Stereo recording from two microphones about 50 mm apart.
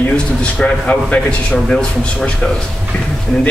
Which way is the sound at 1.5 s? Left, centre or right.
Centre.